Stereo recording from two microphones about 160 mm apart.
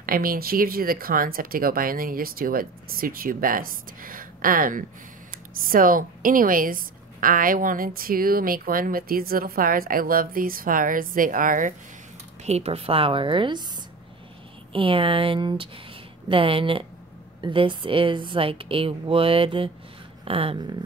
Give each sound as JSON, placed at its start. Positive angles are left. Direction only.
{"t": 0.0, "sound": "a woman's voice", "side_deg": -65}
{"t": 12.4, "sound": "a woman's voice", "side_deg": -40}
{"t": 14.7, "sound": "a woman's voice", "side_deg": -35}